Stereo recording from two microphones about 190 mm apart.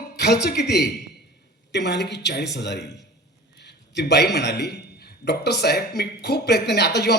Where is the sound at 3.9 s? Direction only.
60° left (ahead or behind).